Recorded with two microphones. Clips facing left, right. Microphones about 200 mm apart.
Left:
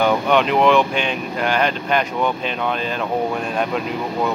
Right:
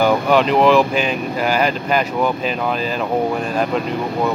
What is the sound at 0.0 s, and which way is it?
Speech, centre (ahead or behind).